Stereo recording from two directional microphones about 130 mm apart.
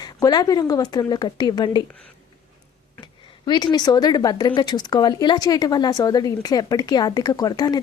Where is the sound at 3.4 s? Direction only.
35° left (ahead or behind).